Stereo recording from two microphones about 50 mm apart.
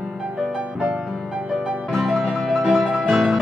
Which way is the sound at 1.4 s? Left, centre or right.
Right.